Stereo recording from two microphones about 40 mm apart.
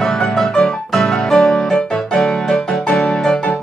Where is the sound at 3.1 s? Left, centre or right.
Centre.